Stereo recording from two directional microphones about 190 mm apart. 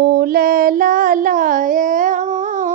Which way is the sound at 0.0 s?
55° right (ahead or behind).